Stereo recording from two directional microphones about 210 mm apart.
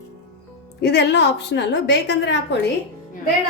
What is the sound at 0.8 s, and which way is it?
A woman's voice, 55° left (ahead or behind).